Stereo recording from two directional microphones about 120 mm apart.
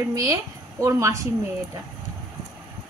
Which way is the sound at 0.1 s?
30° right (ahead or behind).